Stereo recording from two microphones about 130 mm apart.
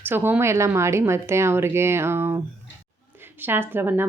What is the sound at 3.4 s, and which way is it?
Speech, 15° right (ahead or behind).